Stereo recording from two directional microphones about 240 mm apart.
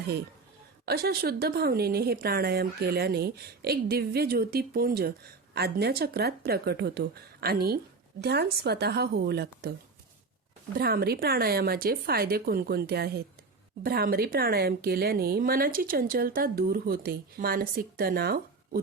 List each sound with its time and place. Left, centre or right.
0.9 s a woman's voice: right
10.8 s a woman's voice: right